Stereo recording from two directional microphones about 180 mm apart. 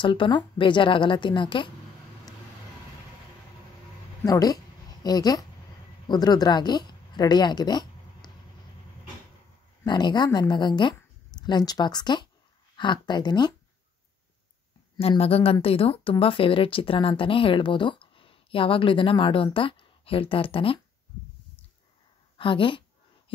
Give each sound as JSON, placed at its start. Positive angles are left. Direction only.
{"t": 0.0, "sound": "speech", "side_deg": 25}
{"t": 4.2, "sound": "speech", "side_deg": 20}
{"t": 9.8, "sound": "speech", "side_deg": 25}
{"t": 15.0, "sound": "speech", "side_deg": 35}
{"t": 22.4, "sound": "speech", "side_deg": 30}